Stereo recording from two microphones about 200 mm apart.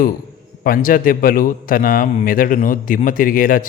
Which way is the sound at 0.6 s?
45° left (ahead or behind).